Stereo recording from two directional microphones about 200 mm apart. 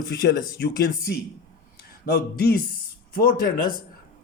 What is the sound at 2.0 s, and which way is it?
Speech, 50° left (ahead or behind).